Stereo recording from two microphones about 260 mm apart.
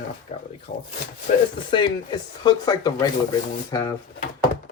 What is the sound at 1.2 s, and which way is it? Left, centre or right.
Speech, centre.